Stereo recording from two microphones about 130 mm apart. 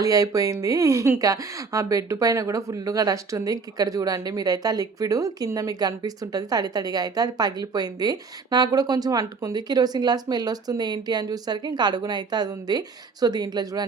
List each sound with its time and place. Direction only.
0.0 s speech: 25° right (ahead or behind)